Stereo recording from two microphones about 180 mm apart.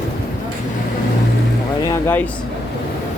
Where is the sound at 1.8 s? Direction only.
15° left (ahead or behind).